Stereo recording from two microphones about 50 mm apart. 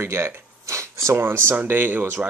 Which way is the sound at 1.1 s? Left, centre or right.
Right.